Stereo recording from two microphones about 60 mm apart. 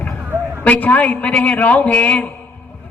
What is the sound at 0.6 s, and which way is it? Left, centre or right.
A man's voice, left.